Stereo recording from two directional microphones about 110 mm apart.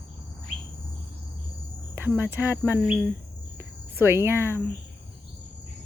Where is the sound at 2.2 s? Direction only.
20° right (ahead or behind).